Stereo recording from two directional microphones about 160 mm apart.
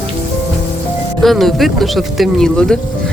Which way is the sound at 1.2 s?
Centre (ahead or behind).